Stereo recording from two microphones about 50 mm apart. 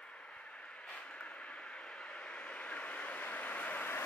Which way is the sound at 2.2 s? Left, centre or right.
Left.